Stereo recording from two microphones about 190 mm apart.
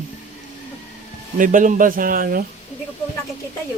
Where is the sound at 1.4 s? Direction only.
45° right (ahead or behind).